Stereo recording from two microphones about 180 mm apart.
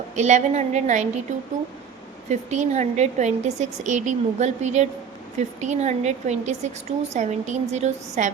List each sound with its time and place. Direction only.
0.2 s a woman's voice: 40° right (ahead or behind)
2.3 s a woman's voice: 40° right (ahead or behind)